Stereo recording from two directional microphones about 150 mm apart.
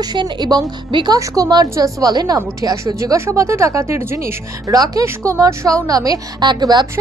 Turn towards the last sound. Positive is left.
turn(degrees=-30)  # may be behind; listen again after turning